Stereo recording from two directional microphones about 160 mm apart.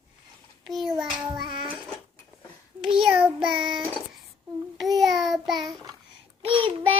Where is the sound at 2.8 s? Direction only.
5° right (ahead or behind).